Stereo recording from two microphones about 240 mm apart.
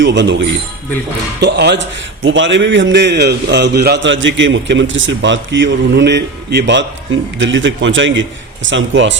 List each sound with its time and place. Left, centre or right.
0.0 s a man's voice: right